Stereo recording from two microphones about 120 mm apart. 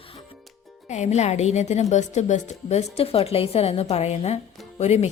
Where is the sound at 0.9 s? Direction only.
75° left (ahead or behind).